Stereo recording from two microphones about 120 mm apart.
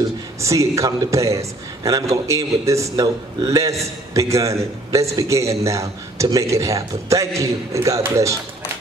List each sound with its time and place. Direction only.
0.4 s a man's voice: 25° right (ahead or behind)